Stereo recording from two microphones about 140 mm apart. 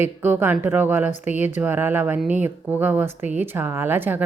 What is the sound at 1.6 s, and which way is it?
Speech, 15° right (ahead or behind).